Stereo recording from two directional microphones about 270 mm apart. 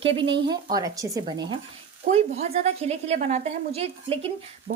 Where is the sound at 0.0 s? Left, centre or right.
Centre.